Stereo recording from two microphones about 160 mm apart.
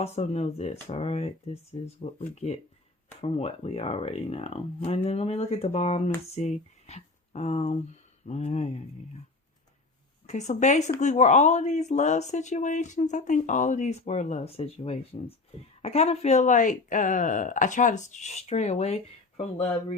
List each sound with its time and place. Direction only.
0.0 s speech: 40° left (ahead or behind)
10.2 s speech: 45° left (ahead or behind)